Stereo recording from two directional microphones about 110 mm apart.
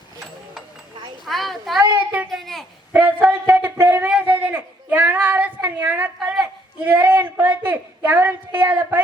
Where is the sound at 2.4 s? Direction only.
Centre (ahead or behind).